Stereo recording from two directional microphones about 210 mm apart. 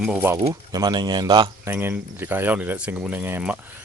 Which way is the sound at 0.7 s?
20° right (ahead or behind).